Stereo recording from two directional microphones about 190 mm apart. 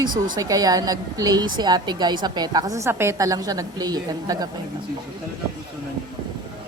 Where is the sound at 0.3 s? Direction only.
20° right (ahead or behind).